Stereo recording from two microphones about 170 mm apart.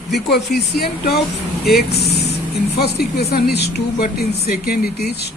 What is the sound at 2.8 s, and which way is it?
Speech, 70° left (ahead or behind).